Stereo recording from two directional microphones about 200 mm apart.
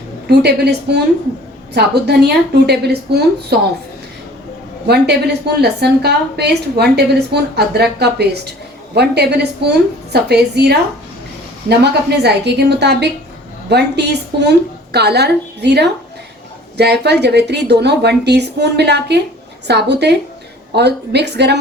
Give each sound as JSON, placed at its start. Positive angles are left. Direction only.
{"t": 0.3, "sound": "a woman's voice", "side_deg": -55}
{"t": 4.9, "sound": "a woman's voice", "side_deg": -55}
{"t": 11.8, "sound": "a woman's voice", "side_deg": -55}